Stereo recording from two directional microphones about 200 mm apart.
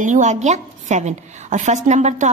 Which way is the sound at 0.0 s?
40° right (ahead or behind).